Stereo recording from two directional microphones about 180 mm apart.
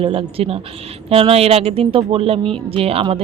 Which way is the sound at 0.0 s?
30° right (ahead or behind).